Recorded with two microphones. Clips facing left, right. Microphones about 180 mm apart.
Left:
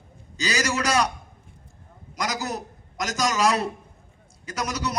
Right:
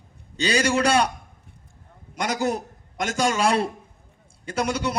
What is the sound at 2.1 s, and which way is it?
A man's voice, 30° right (ahead or behind).